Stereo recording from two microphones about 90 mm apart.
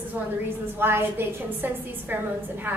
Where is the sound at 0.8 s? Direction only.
25° right (ahead or behind).